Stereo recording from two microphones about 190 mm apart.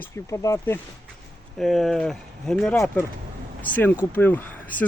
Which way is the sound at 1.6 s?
Centre (ahead or behind).